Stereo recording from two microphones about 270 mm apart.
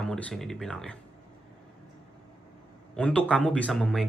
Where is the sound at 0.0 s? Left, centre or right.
Centre.